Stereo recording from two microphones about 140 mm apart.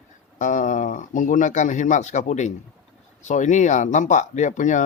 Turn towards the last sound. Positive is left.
turn(degrees=60)  # may be behind; listen again after turning